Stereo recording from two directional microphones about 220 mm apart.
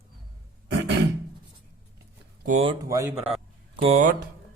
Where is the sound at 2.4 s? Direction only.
30° right (ahead or behind).